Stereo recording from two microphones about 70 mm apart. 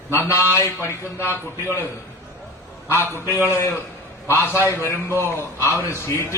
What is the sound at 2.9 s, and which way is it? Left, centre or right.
A man's voice, left.